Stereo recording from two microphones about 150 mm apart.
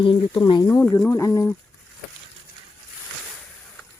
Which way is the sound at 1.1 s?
20° left (ahead or behind).